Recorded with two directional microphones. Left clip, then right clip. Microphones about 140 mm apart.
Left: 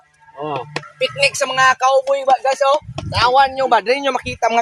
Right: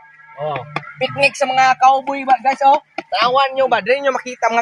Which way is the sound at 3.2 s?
40° left (ahead or behind).